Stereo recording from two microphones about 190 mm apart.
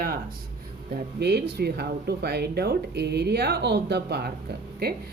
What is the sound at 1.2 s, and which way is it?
Speech, 60° right (ahead or behind).